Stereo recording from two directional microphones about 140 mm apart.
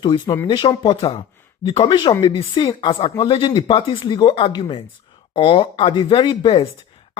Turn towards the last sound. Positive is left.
turn(degrees=40)  # may be behind; listen again after turning